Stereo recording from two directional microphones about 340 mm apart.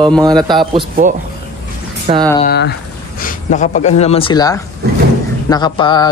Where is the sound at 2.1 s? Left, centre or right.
Centre.